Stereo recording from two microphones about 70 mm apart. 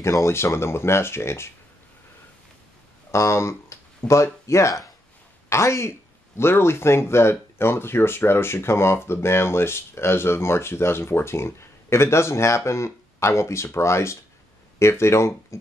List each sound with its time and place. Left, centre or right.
0.0 s speech: left
3.1 s speech: left